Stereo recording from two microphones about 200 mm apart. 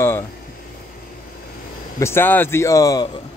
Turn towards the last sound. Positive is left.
turn(degrees=20)  # may be behind; listen again after turning